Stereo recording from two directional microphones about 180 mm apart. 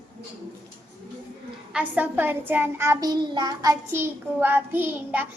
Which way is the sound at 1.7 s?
10° right (ahead or behind).